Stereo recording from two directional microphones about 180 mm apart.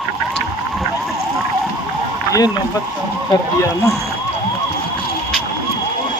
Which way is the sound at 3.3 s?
20° left (ahead or behind).